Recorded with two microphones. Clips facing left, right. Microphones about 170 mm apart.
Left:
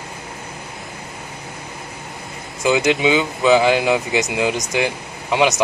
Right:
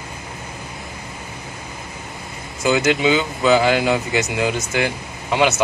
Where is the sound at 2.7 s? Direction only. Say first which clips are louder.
Even; 20° left (ahead or behind).